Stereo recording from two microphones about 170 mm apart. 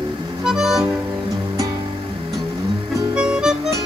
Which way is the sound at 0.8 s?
20° right (ahead or behind).